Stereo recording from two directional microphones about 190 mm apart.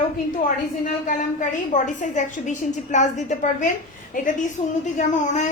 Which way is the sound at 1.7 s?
40° left (ahead or behind).